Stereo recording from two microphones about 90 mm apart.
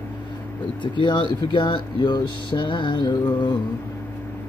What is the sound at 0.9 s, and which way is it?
Speech, 60° left (ahead or behind).